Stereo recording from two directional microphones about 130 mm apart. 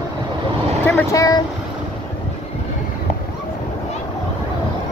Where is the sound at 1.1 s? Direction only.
25° left (ahead or behind).